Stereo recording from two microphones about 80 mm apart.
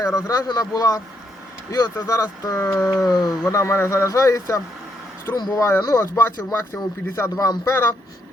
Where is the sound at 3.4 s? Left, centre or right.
Left.